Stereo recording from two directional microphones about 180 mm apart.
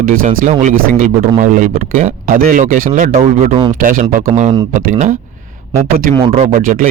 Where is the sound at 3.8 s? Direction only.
45° right (ahead or behind).